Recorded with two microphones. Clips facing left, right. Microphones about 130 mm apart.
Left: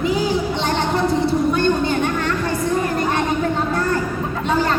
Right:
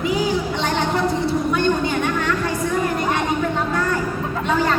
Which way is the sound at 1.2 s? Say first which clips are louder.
Left 2 dB; 30° left (ahead or behind).